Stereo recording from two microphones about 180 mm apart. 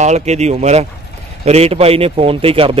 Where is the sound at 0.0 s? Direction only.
40° right (ahead or behind).